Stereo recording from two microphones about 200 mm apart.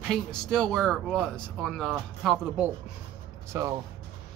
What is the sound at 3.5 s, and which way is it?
Speech, 15° right (ahead or behind).